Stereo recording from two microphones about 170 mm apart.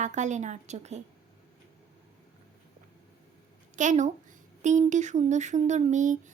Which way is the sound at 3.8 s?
45° right (ahead or behind).